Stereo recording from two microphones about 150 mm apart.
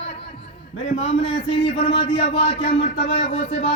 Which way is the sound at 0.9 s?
40° left (ahead or behind).